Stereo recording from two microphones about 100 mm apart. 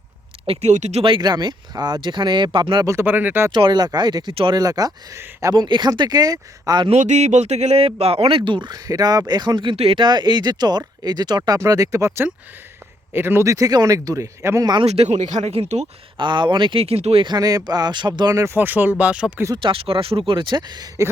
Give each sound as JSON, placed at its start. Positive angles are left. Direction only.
{"t": 0.4, "sound": "speech", "side_deg": -85}
{"t": 2.8, "sound": "speech", "side_deg": -25}
{"t": 3.5, "sound": "speech", "side_deg": -50}
{"t": 5.5, "sound": "speech", "side_deg": -50}
{"t": 6.8, "sound": "speech", "side_deg": -90}
{"t": 9.7, "sound": "speech", "side_deg": -80}
{"t": 10.0, "sound": "speech", "side_deg": -45}
{"t": 14.8, "sound": "speech", "side_deg": -90}
{"t": 16.1, "sound": "speech", "side_deg": -50}
{"t": 16.8, "sound": "speech", "side_deg": -90}
{"t": 17.2, "sound": "speech", "side_deg": -40}
{"t": 18.3, "sound": "speech", "side_deg": -25}
{"t": 19.6, "sound": "speech", "side_deg": -65}